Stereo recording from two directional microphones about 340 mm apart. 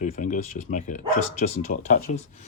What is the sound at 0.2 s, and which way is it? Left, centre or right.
Speech, left.